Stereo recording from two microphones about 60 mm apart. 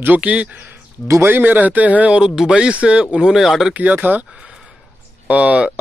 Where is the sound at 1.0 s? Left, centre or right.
Right.